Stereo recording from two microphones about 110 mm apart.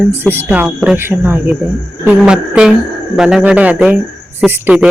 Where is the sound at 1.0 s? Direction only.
20° right (ahead or behind).